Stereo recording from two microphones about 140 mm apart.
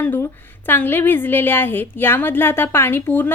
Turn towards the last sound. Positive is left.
turn(degrees=15)  # may be behind; listen again after turning